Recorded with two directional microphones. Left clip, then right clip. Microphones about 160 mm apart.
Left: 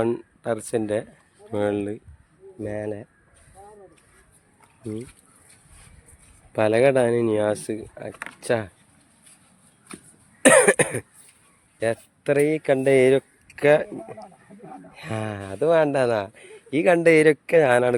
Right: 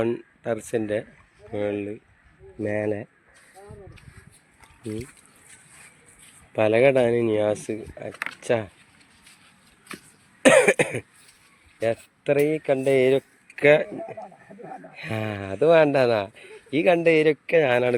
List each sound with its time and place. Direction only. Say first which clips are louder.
0.0 s speech: left 1 dB; 10° left (ahead or behind)
1.5 s speech: left 3 dB; 30° left (ahead or behind)
2.6 s speech: right 4 dB; 25° right (ahead or behind)
6.5 s speech: even; 5° left (ahead or behind)
10.4 s cough: left 1 dB; 5° left (ahead or behind)
12.2 s speech: left 1 dB; 10° left (ahead or behind)
12.5 s speech: left 2 dB; 25° left (ahead or behind)
13.5 s speech: right 1 dB; centre (ahead or behind); by 17.3 s 30° left (ahead or behind)
17.4 s speech: left 2 dB; 15° left (ahead or behind)